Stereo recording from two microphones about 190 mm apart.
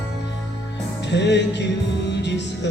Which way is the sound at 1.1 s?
65° left (ahead or behind).